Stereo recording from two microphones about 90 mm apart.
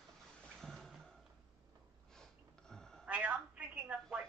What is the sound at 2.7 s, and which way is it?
Telephone, 5° left (ahead or behind).